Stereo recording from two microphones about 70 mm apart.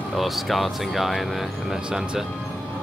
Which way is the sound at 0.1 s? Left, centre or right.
Centre.